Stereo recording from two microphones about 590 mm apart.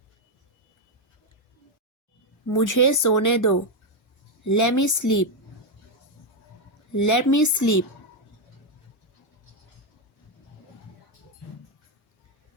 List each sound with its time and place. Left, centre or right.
2.5 s speech: left
6.9 s speech: left